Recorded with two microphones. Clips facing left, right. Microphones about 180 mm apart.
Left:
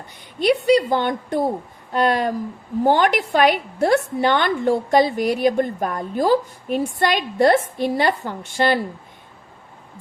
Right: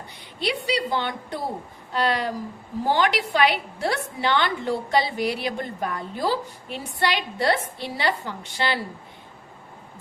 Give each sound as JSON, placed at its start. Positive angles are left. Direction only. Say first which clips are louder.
{"t": 0.3, "sound": "a woman's voice", "louder": "left 10 dB", "side_deg": 50}